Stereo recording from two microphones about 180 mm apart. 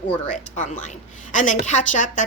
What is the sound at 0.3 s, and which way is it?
A woman's voice, 45° left (ahead or behind).